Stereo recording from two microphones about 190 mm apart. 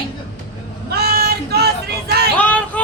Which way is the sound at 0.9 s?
55° right (ahead or behind).